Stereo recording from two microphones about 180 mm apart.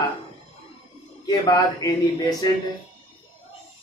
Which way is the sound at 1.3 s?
20° left (ahead or behind).